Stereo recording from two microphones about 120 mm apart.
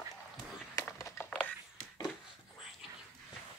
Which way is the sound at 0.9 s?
25° left (ahead or behind).